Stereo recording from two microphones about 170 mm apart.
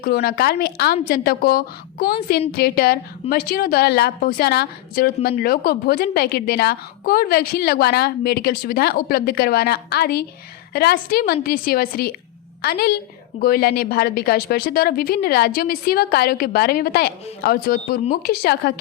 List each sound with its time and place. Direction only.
0.0 s a woman's voice: 60° left (ahead or behind)